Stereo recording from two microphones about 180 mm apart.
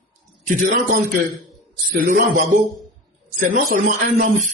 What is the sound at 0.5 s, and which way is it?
Speech, 45° right (ahead or behind).